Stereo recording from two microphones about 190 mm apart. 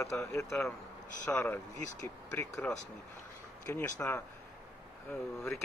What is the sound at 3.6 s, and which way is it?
Speech, 10° left (ahead or behind).